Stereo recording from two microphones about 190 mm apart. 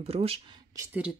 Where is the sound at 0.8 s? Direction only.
5° right (ahead or behind).